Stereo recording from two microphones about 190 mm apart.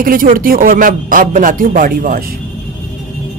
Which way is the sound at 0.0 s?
45° right (ahead or behind).